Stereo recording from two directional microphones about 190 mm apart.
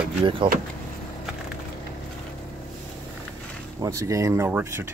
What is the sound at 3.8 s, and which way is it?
Speech, 15° right (ahead or behind).